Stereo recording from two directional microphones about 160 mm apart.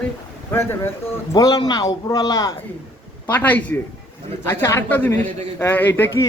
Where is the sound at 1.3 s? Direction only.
25° left (ahead or behind).